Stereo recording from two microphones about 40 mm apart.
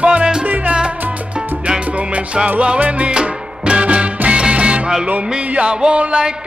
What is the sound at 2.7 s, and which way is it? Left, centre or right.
Music, right.